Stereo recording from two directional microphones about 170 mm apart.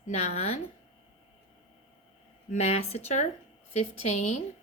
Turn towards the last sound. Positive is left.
turn(degrees=45)  # may be behind; listen again after turning